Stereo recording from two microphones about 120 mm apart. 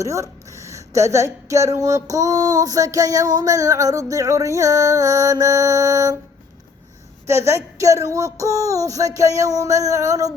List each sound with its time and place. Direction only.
0.0 s speech: 25° right (ahead or behind)
7.3 s speech: 25° right (ahead or behind)